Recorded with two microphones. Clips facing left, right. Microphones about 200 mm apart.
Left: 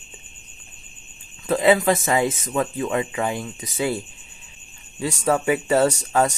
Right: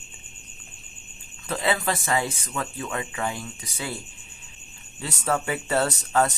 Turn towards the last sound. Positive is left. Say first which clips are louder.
# left 4 dB
turn(degrees=10)  # may be behind; listen again after turning